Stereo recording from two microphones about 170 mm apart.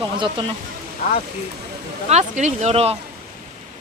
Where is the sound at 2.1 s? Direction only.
45° right (ahead or behind).